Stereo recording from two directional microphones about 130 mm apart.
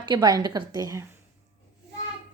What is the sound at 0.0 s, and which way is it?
A woman's voice, 35° right (ahead or behind).